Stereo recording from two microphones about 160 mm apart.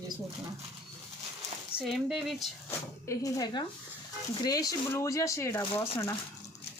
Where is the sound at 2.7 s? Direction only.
20° left (ahead or behind).